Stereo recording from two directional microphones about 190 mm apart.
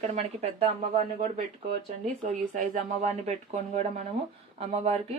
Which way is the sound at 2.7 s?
40° right (ahead or behind).